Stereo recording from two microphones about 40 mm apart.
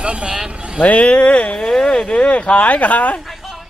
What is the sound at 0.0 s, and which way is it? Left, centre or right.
Speech, right.